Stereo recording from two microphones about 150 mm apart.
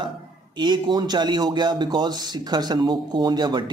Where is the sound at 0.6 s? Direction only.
30° right (ahead or behind).